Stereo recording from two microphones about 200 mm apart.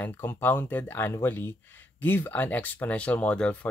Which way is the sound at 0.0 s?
10° left (ahead or behind).